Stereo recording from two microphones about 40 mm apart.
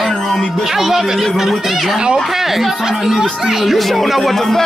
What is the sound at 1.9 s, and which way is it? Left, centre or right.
Speech, centre.